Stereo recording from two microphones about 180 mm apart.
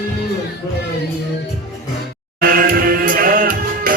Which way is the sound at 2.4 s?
55° right (ahead or behind).